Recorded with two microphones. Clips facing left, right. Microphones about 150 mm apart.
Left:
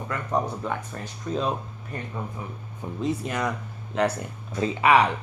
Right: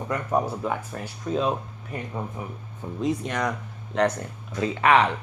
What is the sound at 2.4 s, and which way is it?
Speech, 20° right (ahead or behind).